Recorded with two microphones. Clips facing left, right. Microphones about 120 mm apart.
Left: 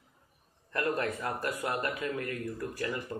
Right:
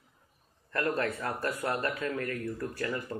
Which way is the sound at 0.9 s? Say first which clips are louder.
Right 1 dB; 15° left (ahead or behind).